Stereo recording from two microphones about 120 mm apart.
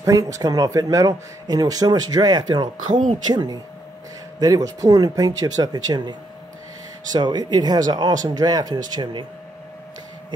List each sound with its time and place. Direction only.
0.0 s speech: 30° right (ahead or behind)
2.9 s speech: 90° right
3.3 s speech: 35° right (ahead or behind)